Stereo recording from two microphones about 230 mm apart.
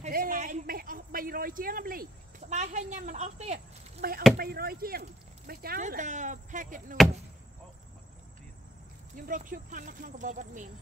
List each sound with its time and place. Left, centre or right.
0.0 s a sound: right
2.5 s speech: right
9.1 s speech: right